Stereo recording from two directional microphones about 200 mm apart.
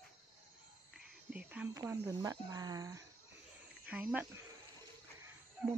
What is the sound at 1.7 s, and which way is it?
Speech, 15° right (ahead or behind).